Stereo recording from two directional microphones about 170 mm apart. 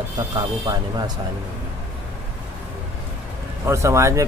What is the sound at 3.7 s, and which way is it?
Speech, 15° right (ahead or behind).